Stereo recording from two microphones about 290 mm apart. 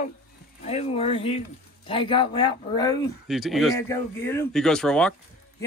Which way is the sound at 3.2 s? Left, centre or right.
Centre.